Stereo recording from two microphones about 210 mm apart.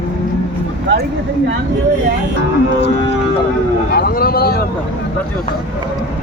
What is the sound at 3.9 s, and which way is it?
Speech, 45° left (ahead or behind).